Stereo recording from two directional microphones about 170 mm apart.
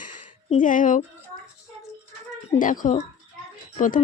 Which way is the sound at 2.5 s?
50° left (ahead or behind).